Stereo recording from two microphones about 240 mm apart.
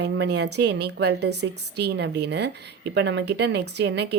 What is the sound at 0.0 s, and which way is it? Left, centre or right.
A woman's voice, right.